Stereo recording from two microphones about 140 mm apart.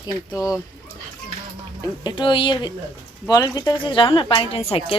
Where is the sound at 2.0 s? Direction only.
30° left (ahead or behind).